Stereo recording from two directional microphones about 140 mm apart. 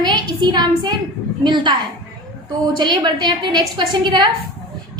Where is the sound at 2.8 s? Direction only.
30° right (ahead or behind).